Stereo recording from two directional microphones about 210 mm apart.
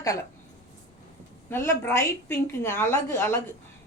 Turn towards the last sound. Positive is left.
turn(degrees=15)  # may be behind; listen again after turning